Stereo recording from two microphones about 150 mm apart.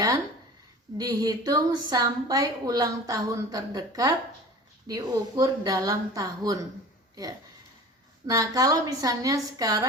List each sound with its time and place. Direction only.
0.9 s a woman's voice: 25° right (ahead or behind)
8.3 s a woman's voice: 25° right (ahead or behind)